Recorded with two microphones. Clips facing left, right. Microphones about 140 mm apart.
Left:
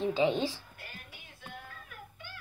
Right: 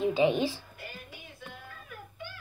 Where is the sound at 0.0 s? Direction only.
15° right (ahead or behind).